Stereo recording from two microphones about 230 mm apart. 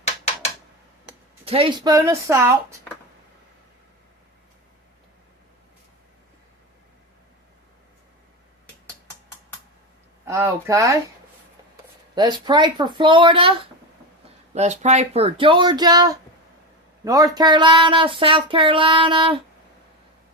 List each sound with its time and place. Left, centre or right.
1.5 s speech: right
10.2 s speech: centre
12.1 s speech: centre